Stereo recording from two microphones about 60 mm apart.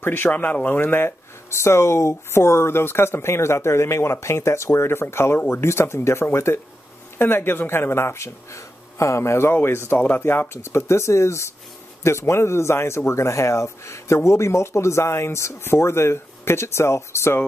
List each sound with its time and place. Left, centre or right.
0.0 s speech: left
0.3 s speech: left